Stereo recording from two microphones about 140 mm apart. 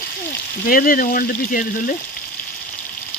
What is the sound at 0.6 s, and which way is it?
Speech, 90° left.